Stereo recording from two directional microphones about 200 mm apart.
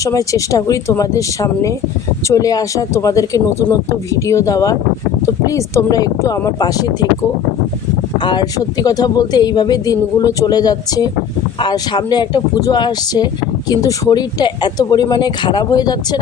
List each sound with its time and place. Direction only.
0.0 s speech: 15° left (ahead or behind)
8.2 s speech: 20° left (ahead or behind)